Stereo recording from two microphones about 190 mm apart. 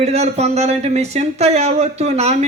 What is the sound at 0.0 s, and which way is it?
A man's voice, 35° right (ahead or behind).